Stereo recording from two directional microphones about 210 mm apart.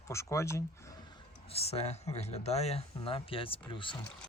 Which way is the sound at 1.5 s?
30° left (ahead or behind).